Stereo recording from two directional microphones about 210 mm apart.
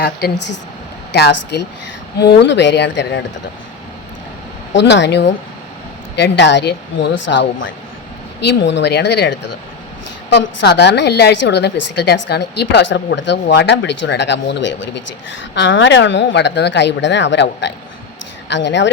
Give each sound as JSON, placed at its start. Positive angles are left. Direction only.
{"t": 0.2, "sound": "a woman's voice", "side_deg": 50}
{"t": 4.7, "sound": "a woman's voice", "side_deg": 55}